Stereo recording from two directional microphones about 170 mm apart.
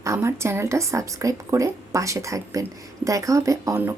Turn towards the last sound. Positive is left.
turn(degrees=-15)  # may be behind; listen again after turning